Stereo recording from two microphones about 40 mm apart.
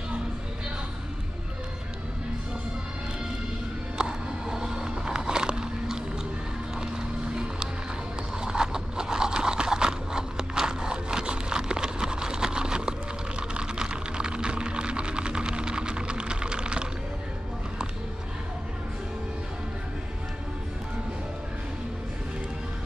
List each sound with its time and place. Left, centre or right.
4.0 s vehicle: centre
8.4 s a sound: centre
13.4 s typing: right